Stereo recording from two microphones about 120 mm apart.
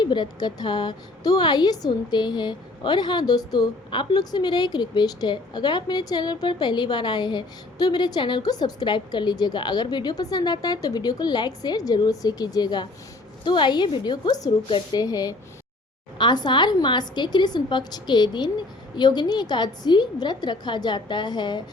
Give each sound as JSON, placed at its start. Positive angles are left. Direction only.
{"t": 0.0, "sound": "a woman's voice", "side_deg": 40}